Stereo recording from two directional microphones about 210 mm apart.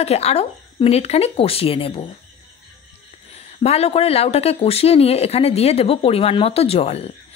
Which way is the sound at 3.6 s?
30° left (ahead or behind).